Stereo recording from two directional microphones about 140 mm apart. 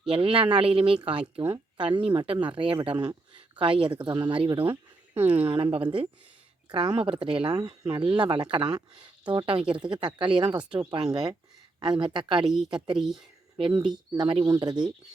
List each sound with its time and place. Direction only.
0.1 s speech: 40° right (ahead or behind)
4.7 s speech: 10° right (ahead or behind)
5.7 s speech: 40° right (ahead or behind)
13.0 s speech: 5° right (ahead or behind)
13.8 s speech: 35° right (ahead or behind)